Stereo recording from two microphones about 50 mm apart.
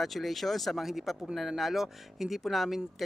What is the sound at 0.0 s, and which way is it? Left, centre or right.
A man's voice, centre.